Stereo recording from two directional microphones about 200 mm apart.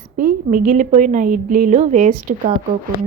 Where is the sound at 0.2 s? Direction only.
45° right (ahead or behind).